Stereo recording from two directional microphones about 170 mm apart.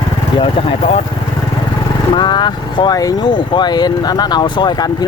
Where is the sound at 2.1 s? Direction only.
25° left (ahead or behind).